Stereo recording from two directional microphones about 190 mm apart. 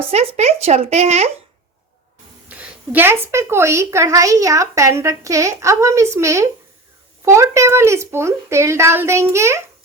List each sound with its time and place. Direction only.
0.1 s speech: 35° right (ahead or behind)
2.5 s a woman's voice: 5° right (ahead or behind)